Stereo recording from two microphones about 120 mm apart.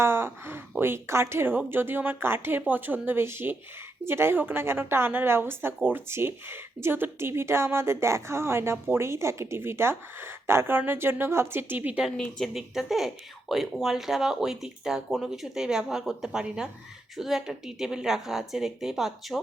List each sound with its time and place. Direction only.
0.0 s a woman's voice: 20° right (ahead or behind)
12.0 s speech: 5° left (ahead or behind)